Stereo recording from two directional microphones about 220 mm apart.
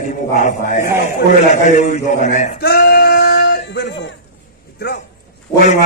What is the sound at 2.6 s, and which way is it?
Male singing, 45° left (ahead or behind).